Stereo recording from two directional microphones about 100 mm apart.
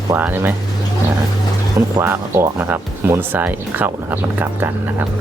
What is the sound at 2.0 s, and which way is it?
Speech, 20° right (ahead or behind).